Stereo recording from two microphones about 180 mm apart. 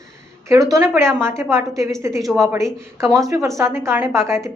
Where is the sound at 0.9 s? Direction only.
15° right (ahead or behind).